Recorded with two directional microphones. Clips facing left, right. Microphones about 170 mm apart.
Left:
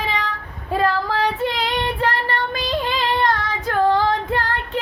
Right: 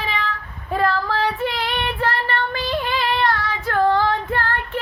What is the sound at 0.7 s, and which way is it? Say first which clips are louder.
Child singing: left 1 dB; 15° left (ahead or behind).